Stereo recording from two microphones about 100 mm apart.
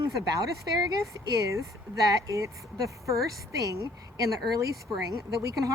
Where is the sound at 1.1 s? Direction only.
30° right (ahead or behind).